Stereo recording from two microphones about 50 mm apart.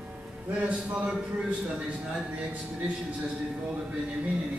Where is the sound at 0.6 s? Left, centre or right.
Right.